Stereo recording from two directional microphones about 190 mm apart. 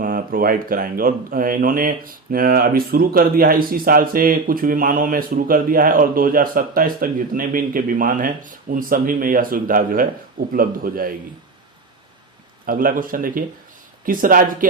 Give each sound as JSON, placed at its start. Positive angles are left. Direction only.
{"t": 0.0, "sound": "speech", "side_deg": -45}
{"t": 12.6, "sound": "speech", "side_deg": -45}